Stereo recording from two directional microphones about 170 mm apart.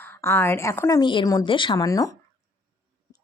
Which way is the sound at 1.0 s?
30° left (ahead or behind).